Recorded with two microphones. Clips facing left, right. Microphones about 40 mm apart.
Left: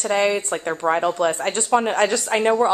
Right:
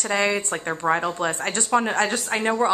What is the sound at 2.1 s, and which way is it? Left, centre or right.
Speech, left.